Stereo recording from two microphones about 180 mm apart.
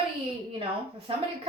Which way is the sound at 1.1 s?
30° right (ahead or behind).